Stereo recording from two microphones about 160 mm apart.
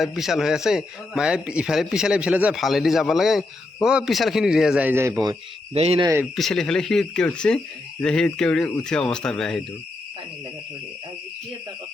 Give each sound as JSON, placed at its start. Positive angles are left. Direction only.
{"t": 0.0, "sound": "a man's voice", "side_deg": 0}
{"t": 5.7, "sound": "speech", "side_deg": -40}
{"t": 6.3, "sound": "a man's voice", "side_deg": 0}